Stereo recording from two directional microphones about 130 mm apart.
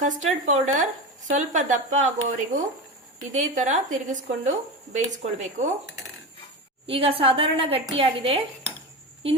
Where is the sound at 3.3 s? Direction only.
65° right (ahead or behind).